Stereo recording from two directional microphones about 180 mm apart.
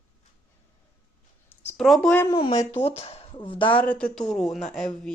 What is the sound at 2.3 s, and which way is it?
A woman's voice, 25° left (ahead or behind).